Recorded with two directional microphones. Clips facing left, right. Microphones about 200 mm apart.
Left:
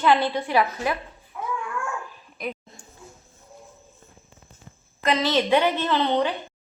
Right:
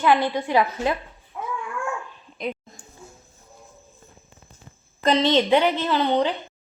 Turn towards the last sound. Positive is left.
turn(degrees=-15)  # may be behind; listen again after turning